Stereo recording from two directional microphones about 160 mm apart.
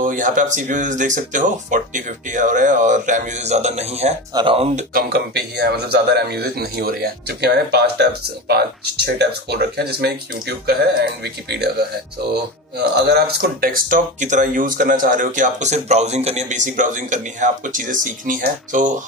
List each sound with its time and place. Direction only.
0.0 s speech: 55° right (ahead or behind)
4.3 s speech: 30° right (ahead or behind)
4.9 s a man's voice: 90° right
12.7 s speech: 90° right; by 18.9 s 55° right (ahead or behind)